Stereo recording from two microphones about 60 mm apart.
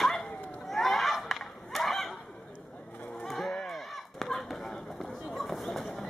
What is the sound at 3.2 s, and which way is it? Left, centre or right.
Sheep, centre.